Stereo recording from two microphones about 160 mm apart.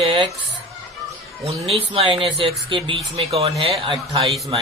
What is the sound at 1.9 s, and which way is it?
Speech, 35° right (ahead or behind).